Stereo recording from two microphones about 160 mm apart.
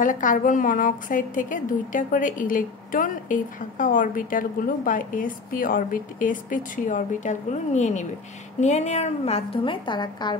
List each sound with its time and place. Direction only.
0.0 s a woman's voice: 55° left (ahead or behind); by 10.3 s 30° left (ahead or behind)